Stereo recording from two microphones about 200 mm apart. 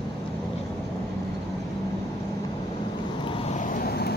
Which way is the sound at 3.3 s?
35° left (ahead or behind).